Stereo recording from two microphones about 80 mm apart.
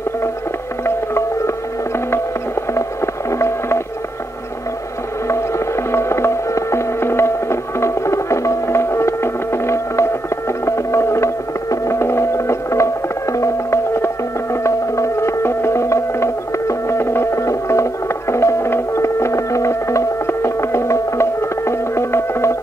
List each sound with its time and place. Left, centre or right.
0.8 s music: left
3.3 s a sound: left
5.9 s music: left